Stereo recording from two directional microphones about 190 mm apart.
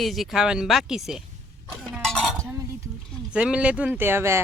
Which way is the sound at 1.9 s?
5° left (ahead or behind).